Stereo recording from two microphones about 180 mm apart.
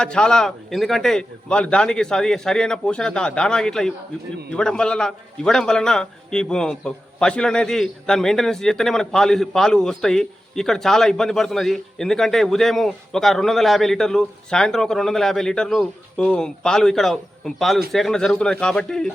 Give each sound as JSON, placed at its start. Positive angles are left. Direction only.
{"t": 0.0, "sound": "a man's voice", "side_deg": 5}